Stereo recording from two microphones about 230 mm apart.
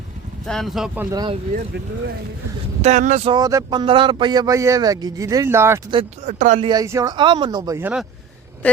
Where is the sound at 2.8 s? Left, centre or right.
Right; by 5.9 s centre.